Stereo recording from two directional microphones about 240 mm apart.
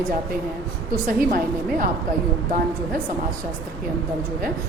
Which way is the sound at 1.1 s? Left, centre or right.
Right.